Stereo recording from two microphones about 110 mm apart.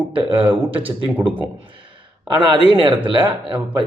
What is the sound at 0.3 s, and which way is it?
Speech, 55° right (ahead or behind).